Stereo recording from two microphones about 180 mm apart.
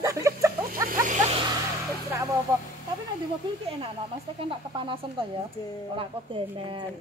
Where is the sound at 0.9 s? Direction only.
45° right (ahead or behind).